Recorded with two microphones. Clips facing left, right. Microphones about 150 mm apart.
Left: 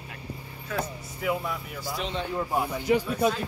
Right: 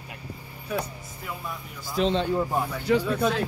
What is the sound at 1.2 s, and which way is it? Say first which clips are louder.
Speech: left 8 dB; 85° left.